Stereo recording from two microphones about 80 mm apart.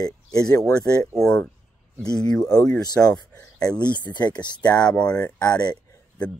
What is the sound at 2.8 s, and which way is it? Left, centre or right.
Speech, left.